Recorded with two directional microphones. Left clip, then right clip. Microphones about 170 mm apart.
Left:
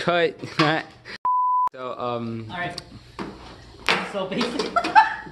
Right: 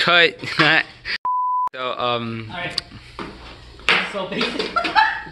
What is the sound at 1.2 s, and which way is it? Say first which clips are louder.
Speech: left 1 dB; centre (ahead or behind).